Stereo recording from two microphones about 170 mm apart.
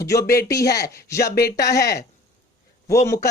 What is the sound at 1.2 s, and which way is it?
Speech, 65° left (ahead or behind).